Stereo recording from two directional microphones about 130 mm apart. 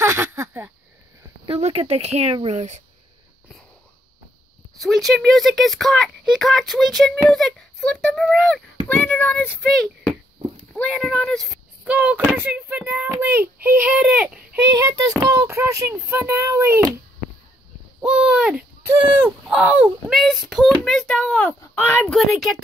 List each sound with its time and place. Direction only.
0.0 s a sound: 20° right (ahead or behind)
1.6 s speech: 50° right (ahead or behind)
4.7 s a child's voice: centre (ahead or behind)
9.6 s speech: 5° left (ahead or behind)
11.8 s speech: 10° right (ahead or behind)
14.7 s child singing: 30° right (ahead or behind)
18.0 s speech: 10° right (ahead or behind)
20.1 s speech: centre (ahead or behind)
22.1 s speech: centre (ahead or behind)